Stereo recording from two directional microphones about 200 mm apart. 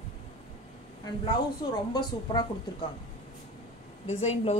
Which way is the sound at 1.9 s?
20° left (ahead or behind).